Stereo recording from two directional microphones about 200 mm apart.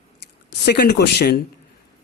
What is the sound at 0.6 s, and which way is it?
Speech, 55° left (ahead or behind).